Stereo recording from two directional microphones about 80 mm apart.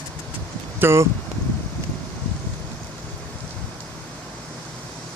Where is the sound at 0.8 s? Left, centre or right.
Right.